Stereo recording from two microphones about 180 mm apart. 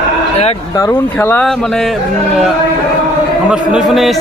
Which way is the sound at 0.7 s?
20° left (ahead or behind).